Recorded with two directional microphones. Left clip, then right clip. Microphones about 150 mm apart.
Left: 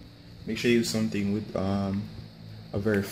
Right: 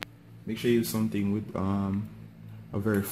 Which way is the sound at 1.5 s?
30° right (ahead or behind).